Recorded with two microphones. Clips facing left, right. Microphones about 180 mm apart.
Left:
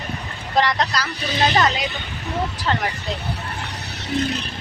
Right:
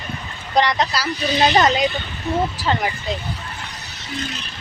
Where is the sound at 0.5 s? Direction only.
Centre (ahead or behind).